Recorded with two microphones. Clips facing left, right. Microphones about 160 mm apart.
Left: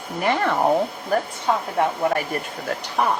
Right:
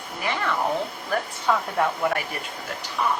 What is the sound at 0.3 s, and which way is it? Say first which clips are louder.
Speech: left 6 dB; 50° left (ahead or behind).